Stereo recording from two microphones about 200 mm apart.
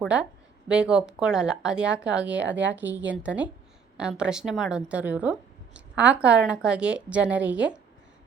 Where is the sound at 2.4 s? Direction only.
65° right (ahead or behind).